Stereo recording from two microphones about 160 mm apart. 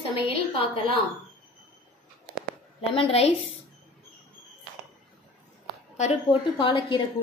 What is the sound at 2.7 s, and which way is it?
Speech, 40° left (ahead or behind).